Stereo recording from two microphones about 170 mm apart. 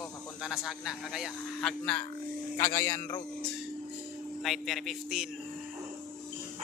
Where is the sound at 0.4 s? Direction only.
Centre (ahead or behind).